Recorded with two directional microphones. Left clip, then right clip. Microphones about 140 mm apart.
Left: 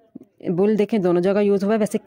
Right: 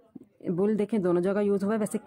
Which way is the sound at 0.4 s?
30° left (ahead or behind).